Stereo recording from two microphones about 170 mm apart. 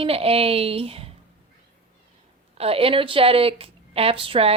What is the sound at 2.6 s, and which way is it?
A woman's voice, 35° right (ahead or behind).